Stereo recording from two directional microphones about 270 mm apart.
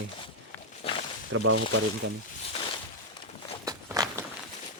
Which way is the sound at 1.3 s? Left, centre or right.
Right.